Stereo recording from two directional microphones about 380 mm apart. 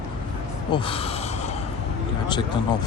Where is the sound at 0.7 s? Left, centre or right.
Centre.